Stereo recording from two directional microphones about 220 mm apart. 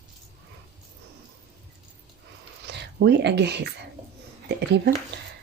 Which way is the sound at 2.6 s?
50° right (ahead or behind).